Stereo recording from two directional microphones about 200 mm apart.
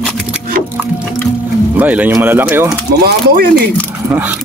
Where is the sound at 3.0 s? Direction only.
45° right (ahead or behind).